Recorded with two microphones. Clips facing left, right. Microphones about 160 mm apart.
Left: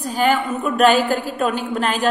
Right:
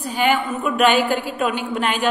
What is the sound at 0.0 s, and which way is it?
A woman's voice, 40° left (ahead or behind).